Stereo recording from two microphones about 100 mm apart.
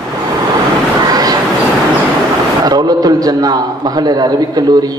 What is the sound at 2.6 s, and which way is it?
A man's voice, 40° right (ahead or behind).